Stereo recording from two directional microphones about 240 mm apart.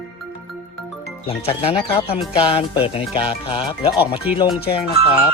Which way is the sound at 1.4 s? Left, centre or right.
Left.